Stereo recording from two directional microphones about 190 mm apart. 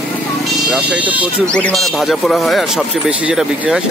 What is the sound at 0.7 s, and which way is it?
Speech, 5° right (ahead or behind).